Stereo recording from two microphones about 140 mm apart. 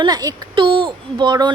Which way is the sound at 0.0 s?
30° right (ahead or behind).